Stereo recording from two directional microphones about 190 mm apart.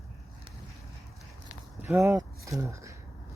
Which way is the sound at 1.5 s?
15° right (ahead or behind).